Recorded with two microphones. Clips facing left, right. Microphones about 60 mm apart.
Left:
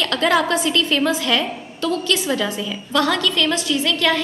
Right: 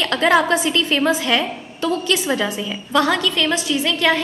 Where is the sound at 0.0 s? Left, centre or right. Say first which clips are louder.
Right 2 dB; right.